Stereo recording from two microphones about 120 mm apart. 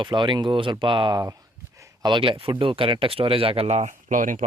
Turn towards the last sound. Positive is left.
turn(degrees=-90)